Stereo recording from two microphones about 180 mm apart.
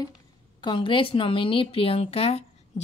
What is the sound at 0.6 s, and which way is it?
A woman's voice, 25° left (ahead or behind).